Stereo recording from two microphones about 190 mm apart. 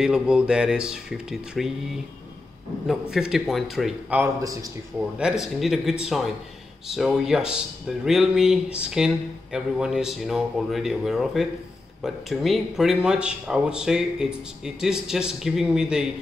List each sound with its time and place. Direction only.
0.0 s speech: 5° right (ahead or behind)
2.9 s speech: 5° right (ahead or behind)
4.2 s a man's voice: 20° right (ahead or behind)
5.4 s speech: centre (ahead or behind)